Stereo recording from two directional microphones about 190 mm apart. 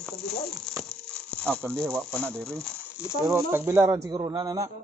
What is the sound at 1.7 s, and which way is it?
Speech, 5° left (ahead or behind).